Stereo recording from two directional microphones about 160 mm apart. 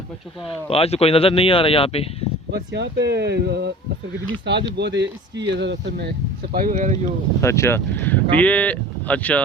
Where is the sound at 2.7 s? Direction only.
90° right; by 7.1 s 50° right (ahead or behind).